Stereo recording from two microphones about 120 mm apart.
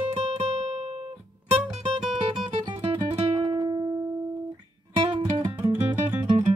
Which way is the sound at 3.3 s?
40° right (ahead or behind).